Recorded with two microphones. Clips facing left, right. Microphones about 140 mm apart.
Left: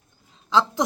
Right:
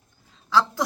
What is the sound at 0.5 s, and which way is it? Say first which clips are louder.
Speech: left 1 dB; 20° left (ahead or behind).